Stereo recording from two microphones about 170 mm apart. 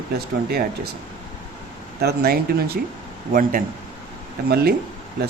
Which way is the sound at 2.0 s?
70° right (ahead or behind).